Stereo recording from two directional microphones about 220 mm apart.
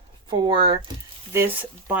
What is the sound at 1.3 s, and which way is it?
Speech, 10° right (ahead or behind).